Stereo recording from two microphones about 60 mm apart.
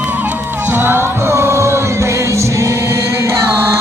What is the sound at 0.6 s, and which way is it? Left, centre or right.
Music, right.